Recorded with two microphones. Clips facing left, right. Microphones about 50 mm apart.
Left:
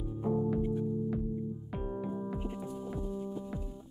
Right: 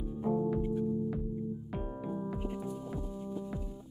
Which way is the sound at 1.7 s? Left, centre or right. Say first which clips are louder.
Left 1 dB; centre.